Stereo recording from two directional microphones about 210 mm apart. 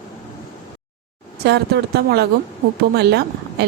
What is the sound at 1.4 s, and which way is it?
Speech, 50° right (ahead or behind).